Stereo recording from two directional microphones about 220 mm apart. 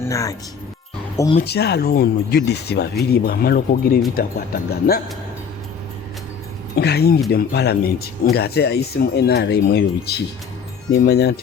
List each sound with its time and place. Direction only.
0.1 s speech: 15° left (ahead or behind)
1.4 s speech: 45° left (ahead or behind)
6.7 s speech: 45° left (ahead or behind)